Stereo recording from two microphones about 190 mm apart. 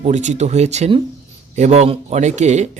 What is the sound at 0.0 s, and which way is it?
Speech, 40° right (ahead or behind).